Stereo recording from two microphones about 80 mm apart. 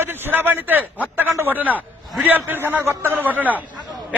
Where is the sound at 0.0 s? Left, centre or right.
Right.